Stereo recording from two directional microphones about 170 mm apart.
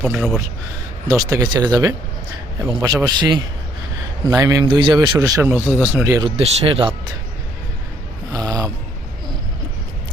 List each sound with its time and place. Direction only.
0.0 s speech: 5° right (ahead or behind)
1.0 s speech: 20° right (ahead or behind)
6.1 s speech: 35° right (ahead or behind)
8.3 s snoring: 20° right (ahead or behind)